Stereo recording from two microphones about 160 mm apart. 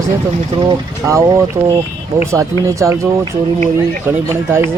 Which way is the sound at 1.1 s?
20° right (ahead or behind).